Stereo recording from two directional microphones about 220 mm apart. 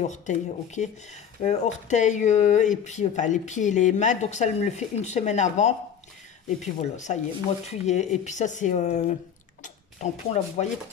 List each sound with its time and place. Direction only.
0.0 s speech: 35° left (ahead or behind)